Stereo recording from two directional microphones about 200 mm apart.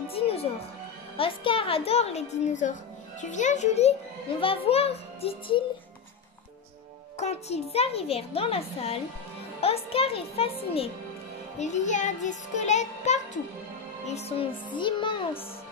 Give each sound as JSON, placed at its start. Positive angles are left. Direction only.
{"t": 0.1, "sound": "music", "side_deg": 30}
{"t": 1.1, "sound": "a woman's voice", "side_deg": 25}
{"t": 7.2, "sound": "a child's voice", "side_deg": 35}